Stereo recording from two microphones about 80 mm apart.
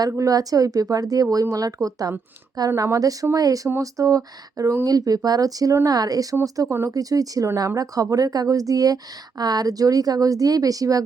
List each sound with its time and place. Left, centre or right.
0.2 s speech: right